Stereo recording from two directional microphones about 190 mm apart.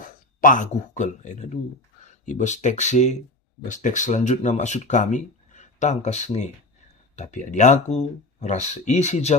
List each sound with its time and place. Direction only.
0.0 s speech: 45° left (ahead or behind)